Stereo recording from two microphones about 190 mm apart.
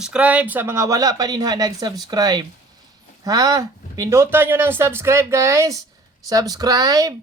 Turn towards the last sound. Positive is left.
turn(degrees=-20)  # may be behind; listen again after turning